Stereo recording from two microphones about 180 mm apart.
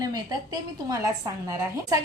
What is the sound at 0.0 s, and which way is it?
A woman's voice, 20° right (ahead or behind).